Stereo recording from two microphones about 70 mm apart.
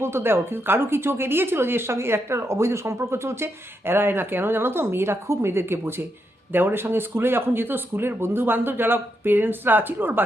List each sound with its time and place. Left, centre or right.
0.0 s a woman's voice: right